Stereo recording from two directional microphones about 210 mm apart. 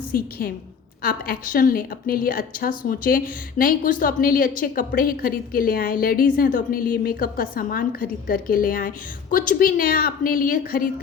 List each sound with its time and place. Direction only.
0.1 s a woman's voice: 45° left (ahead or behind)